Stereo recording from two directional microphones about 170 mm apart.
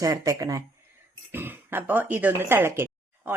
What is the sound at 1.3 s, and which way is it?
Throat clearing, 10° right (ahead or behind).